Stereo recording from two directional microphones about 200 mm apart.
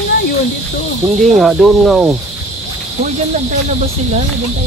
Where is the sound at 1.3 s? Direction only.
Centre (ahead or behind).